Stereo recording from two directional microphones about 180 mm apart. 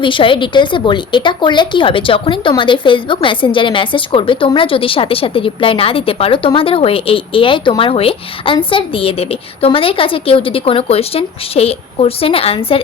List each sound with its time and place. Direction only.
0.0 s a woman's voice: 30° left (ahead or behind)